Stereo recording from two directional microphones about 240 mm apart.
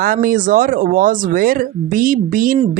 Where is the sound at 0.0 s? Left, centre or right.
Right.